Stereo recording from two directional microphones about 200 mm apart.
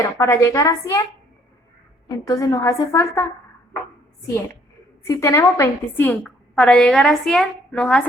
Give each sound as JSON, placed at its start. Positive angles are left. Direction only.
{"t": 0.2, "sound": "a woman's voice", "side_deg": 15}
{"t": 2.0, "sound": "a woman's voice", "side_deg": 20}
{"t": 5.0, "sound": "a woman's voice", "side_deg": 15}